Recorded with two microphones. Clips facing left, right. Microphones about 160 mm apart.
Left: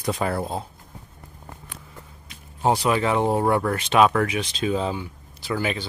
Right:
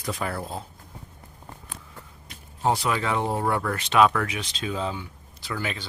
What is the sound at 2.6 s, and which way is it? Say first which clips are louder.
Speech: left 4 dB; 20° left (ahead or behind).